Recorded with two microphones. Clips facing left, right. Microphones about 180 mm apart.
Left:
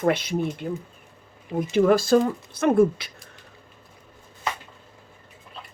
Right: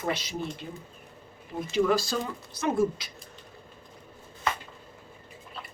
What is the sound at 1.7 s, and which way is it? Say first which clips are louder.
Speech: left 7 dB; 55° left (ahead or behind).